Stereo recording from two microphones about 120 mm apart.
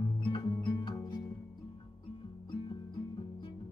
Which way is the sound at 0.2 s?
40° left (ahead or behind).